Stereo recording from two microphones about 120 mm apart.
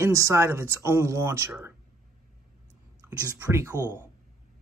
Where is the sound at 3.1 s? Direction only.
20° right (ahead or behind).